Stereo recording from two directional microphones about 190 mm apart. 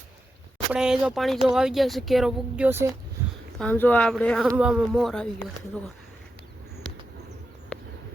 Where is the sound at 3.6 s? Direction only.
10° left (ahead or behind).